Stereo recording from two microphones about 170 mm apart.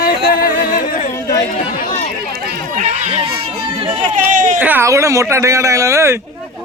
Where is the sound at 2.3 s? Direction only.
65° right (ahead or behind).